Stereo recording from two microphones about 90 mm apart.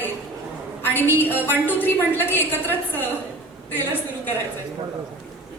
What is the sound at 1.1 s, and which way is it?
A woman's voice, 20° left (ahead or behind).